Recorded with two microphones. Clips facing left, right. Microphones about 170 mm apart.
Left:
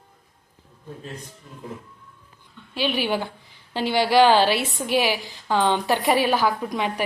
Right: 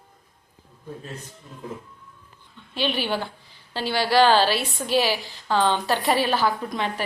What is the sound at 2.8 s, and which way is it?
A woman's voice, 10° left (ahead or behind).